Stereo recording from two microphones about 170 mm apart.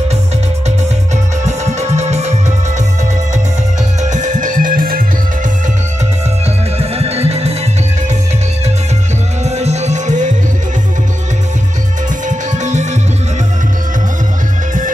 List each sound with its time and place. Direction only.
0.7 s music: 40° right (ahead or behind)
4.0 s music: 45° right (ahead or behind)
6.8 s music: 35° right (ahead or behind)
9.4 s music: 40° right (ahead or behind)
12.3 s music: 45° right (ahead or behind)